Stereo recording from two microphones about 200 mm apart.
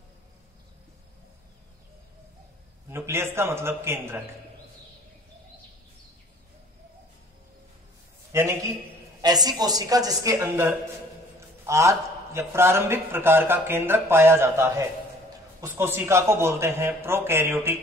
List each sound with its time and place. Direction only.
2.9 s a man's voice: 10° right (ahead or behind)
8.3 s a man's voice: 15° right (ahead or behind)